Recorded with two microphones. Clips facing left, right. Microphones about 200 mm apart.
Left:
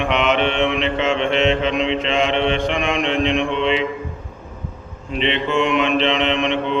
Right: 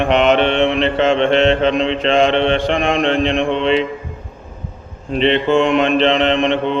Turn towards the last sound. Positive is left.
turn(degrees=-35)  # may be behind; listen again after turning